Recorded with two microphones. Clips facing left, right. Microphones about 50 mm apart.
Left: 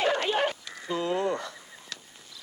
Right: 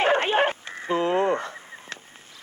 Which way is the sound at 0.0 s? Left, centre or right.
Right.